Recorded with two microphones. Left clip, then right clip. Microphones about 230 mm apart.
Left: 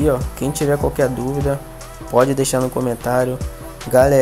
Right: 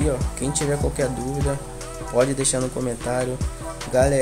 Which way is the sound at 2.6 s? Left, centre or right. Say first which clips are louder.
Left 6 dB; centre.